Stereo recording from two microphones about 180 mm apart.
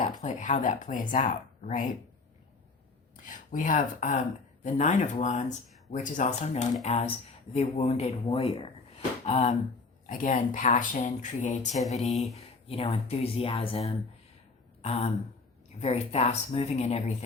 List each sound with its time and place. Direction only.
0.2 s speech: 45° left (ahead or behind)
3.2 s speech: 45° left (ahead or behind)
10.1 s speech: 45° left (ahead or behind)